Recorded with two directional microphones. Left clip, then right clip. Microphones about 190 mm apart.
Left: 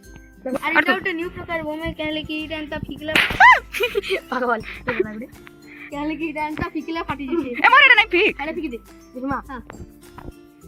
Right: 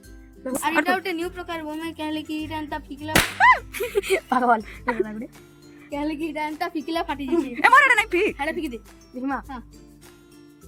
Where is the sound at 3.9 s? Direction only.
55° right (ahead or behind).